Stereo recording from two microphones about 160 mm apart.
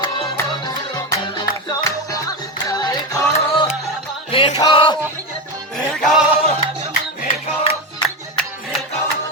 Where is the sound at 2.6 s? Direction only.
25° left (ahead or behind).